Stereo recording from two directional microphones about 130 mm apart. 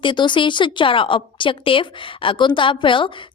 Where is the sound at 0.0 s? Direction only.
40° left (ahead or behind).